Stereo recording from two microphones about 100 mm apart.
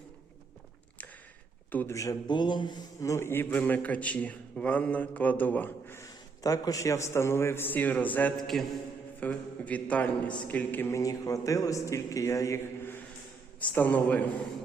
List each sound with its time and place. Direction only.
1.9 s a man's voice: 35° left (ahead or behind)
2.2 s speech: 50° left (ahead or behind)
3.0 s a man's voice: 30° left (ahead or behind)
6.0 s a man's voice: 35° left (ahead or behind); by 8.3 s 15° left (ahead or behind)
8.4 s a man's voice: 5° left (ahead or behind)
9.2 s a man's voice: 15° left (ahead or behind)
10.9 s a man's voice: 35° left (ahead or behind); by 14.3 s 15° left (ahead or behind)